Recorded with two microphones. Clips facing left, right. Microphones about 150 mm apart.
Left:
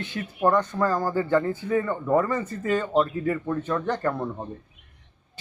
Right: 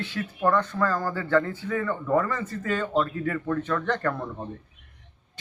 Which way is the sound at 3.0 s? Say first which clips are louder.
Left 2 dB; 25° left (ahead or behind).